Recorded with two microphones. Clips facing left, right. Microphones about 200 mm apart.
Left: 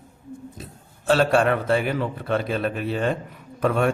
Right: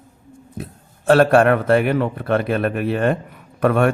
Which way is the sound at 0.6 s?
55° right (ahead or behind).